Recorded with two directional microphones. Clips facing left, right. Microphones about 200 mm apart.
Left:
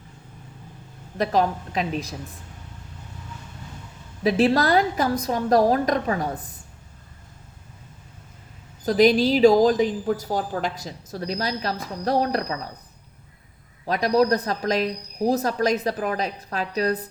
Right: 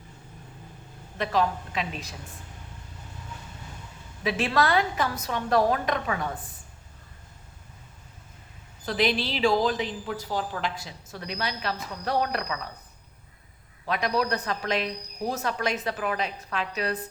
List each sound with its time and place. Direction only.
1.2 s a woman's voice: 40° left (ahead or behind)
4.2 s a woman's voice: 35° left (ahead or behind)
8.8 s a woman's voice: 40° left (ahead or behind)
13.8 s a woman's voice: 40° left (ahead or behind)